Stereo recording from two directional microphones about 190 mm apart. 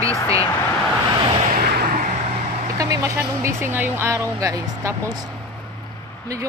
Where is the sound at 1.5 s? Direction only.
55° right (ahead or behind).